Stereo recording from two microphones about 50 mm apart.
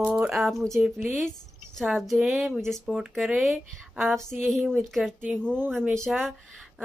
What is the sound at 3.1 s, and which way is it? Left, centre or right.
Speech, centre.